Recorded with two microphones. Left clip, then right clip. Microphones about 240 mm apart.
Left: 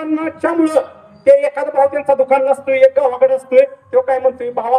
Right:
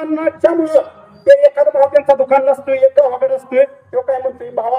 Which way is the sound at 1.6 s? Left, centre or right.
Left.